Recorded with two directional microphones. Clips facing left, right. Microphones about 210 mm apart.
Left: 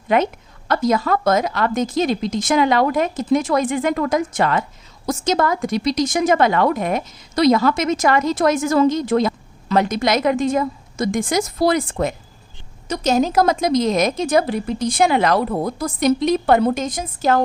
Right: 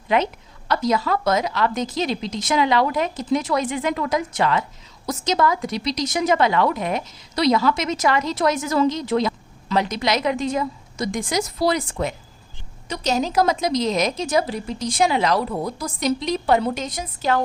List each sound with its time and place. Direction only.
0.1 s a woman's voice: 50° left (ahead or behind)